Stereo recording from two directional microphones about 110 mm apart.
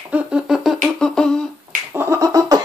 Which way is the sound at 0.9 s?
5° left (ahead or behind).